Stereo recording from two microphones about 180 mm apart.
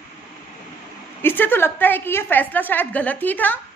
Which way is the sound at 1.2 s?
10° left (ahead or behind).